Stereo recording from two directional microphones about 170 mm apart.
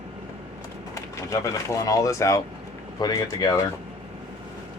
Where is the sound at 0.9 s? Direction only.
20° left (ahead or behind).